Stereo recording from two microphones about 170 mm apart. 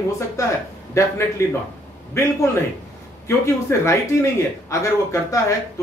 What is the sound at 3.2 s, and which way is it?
A man's voice, 15° left (ahead or behind).